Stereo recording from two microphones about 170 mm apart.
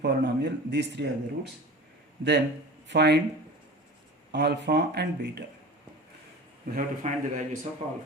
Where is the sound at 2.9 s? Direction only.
80° right.